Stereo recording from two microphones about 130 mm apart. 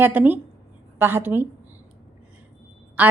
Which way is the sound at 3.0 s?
15° right (ahead or behind).